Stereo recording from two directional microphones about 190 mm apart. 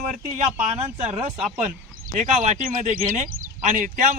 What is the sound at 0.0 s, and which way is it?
Speech, 45° right (ahead or behind).